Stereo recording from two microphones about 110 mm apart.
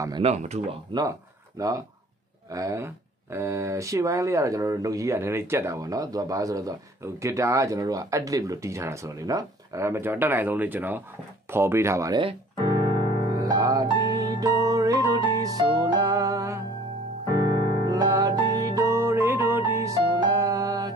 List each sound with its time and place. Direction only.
0.2 s speech: 90° right
0.9 s speech: 50° right (ahead or behind)
1.6 s speech: 30° right (ahead or behind)
12.2 s piano: 50° right (ahead or behind)
13.3 s music: 35° right (ahead or behind)
17.8 s music: 35° right (ahead or behind)
19.9 s music: 35° right (ahead or behind)